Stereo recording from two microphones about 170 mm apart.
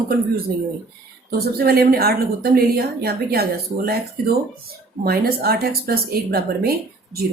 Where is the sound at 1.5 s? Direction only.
65° right (ahead or behind).